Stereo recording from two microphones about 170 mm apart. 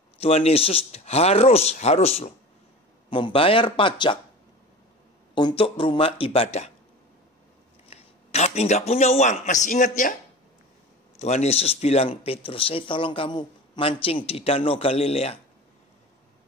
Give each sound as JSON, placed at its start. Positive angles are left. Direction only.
{"t": 0.2, "sound": "speech", "side_deg": 35}
{"t": 5.3, "sound": "speech", "side_deg": 30}
{"t": 7.9, "sound": "a man's voice", "side_deg": 40}
{"t": 11.1, "sound": "speech", "side_deg": 40}